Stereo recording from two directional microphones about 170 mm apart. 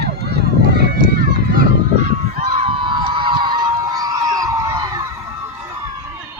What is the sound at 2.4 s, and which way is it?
Crowd, 35° right (ahead or behind).